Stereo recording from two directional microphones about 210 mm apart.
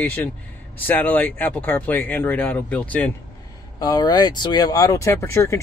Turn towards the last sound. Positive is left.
turn(degrees=15)  # may be behind; listen again after turning